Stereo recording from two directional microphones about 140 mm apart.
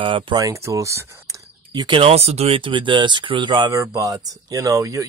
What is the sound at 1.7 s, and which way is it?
Speech, 35° right (ahead or behind).